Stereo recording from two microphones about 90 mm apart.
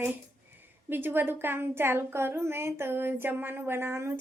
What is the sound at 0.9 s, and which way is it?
A woman's voice, 25° right (ahead or behind).